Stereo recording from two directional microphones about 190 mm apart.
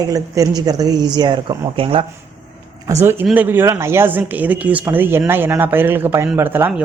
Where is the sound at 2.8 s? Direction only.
15° right (ahead or behind).